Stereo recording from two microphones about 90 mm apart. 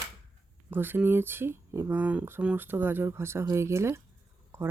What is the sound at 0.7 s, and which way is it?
Speech, 25° right (ahead or behind).